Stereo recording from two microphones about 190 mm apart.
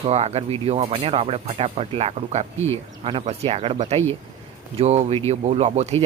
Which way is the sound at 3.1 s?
30° right (ahead or behind).